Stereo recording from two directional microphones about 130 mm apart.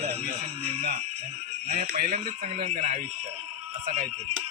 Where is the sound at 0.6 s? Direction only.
55° right (ahead or behind).